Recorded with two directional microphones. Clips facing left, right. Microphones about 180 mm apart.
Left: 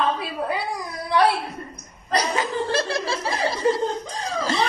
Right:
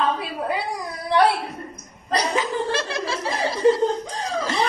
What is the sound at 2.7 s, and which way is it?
Snicker, 35° left (ahead or behind).